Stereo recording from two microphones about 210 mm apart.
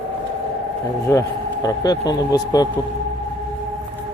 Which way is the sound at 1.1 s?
15° left (ahead or behind).